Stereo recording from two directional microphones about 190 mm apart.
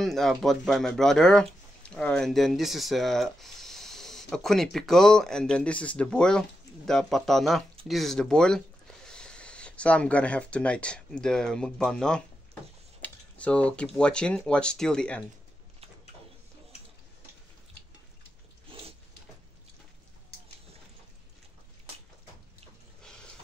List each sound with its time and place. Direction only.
0.0 s speech: centre (ahead or behind)
18.7 s dog: 30° right (ahead or behind)
23.0 s a sound: 5° left (ahead or behind)